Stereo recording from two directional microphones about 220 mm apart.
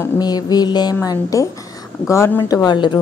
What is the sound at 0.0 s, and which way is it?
A woman's voice, 20° left (ahead or behind).